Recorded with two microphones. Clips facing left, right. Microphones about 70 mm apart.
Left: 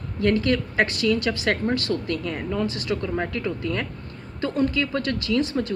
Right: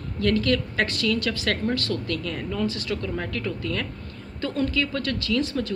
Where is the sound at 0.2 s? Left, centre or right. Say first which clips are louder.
Left 1 dB; left.